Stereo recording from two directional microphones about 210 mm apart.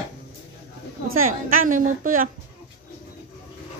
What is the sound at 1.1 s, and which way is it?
A child's voice, 40° right (ahead or behind).